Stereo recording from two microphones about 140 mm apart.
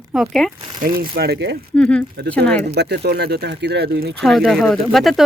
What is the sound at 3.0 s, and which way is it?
Speech, 90° right.